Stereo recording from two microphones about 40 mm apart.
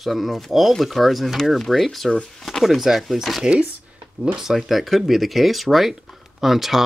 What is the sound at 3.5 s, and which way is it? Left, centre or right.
Speech, right.